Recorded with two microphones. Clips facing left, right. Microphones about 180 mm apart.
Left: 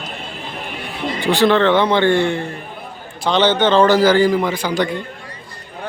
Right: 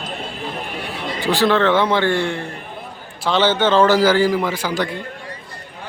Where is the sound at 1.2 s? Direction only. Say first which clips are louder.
Left 2 dB; 5° right (ahead or behind).